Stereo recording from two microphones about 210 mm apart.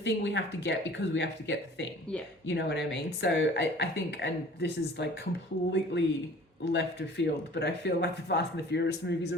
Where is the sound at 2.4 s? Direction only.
55° left (ahead or behind).